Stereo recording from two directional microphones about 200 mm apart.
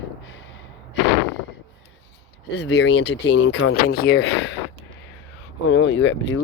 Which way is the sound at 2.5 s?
60° left (ahead or behind).